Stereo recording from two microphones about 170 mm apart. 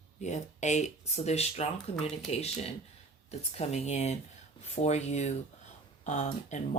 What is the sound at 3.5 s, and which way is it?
Speech, 40° left (ahead or behind).